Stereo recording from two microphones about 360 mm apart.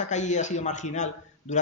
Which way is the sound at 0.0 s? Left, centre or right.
Centre.